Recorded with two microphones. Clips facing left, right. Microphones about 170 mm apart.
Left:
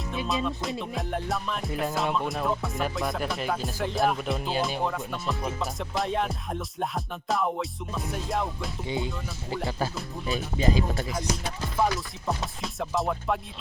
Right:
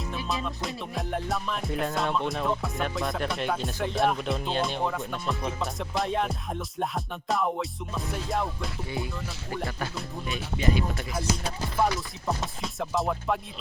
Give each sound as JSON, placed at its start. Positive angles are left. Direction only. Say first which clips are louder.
{"t": 0.4, "sound": "music", "louder": "left 3 dB", "side_deg": 0}
{"t": 8.9, "sound": "music", "louder": "left 6 dB", "side_deg": 20}
{"t": 10.2, "sound": "speech", "louder": "left 2 dB", "side_deg": 35}
{"t": 11.8, "sound": "music", "louder": "even", "side_deg": 0}